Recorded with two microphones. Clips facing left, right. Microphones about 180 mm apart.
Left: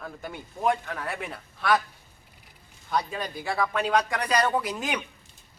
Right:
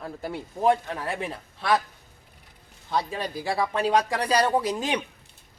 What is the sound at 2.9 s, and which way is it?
Speech, 30° right (ahead or behind).